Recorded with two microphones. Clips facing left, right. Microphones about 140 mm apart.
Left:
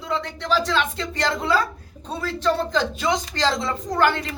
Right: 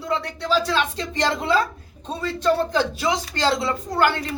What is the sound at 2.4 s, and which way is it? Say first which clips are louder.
Speech: right 2 dB; 10° right (ahead or behind).